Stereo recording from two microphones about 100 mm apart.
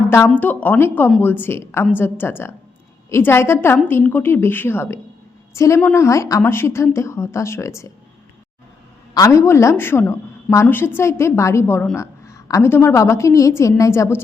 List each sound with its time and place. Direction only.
0.3 s a woman's voice: 15° left (ahead or behind)
9.1 s a woman's voice: 35° left (ahead or behind)